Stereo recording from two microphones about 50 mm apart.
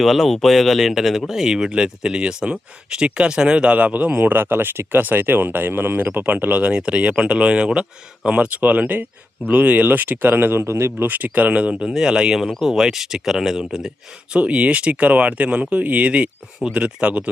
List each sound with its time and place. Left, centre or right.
0.0 s speech: centre; by 6.1 s right
6.1 s speech: right; by 8.4 s centre
8.5 s speech: right
10.7 s speech: right
11.0 s speech: right
11.8 s speech: centre
14.3 s speech: right